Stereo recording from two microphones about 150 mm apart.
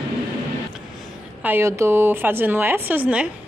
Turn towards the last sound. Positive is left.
turn(degrees=-10)  # may be behind; listen again after turning